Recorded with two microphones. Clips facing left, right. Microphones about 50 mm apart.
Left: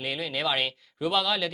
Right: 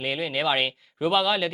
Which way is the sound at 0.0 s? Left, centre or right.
Centre.